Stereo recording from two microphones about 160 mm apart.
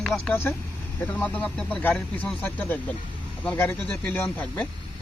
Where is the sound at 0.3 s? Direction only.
15° left (ahead or behind).